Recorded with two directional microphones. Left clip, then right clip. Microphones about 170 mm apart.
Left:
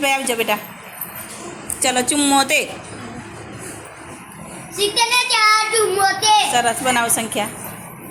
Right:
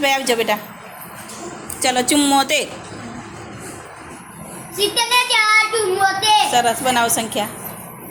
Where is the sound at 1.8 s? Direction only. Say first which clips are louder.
Right 2 dB; 10° right (ahead or behind).